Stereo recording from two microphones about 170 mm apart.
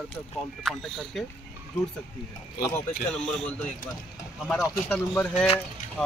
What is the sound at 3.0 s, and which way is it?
Speech, 5° left (ahead or behind).